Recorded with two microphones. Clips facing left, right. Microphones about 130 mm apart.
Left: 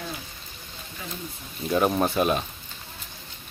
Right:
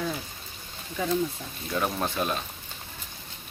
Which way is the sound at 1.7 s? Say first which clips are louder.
Left 6 dB; 20° left (ahead or behind).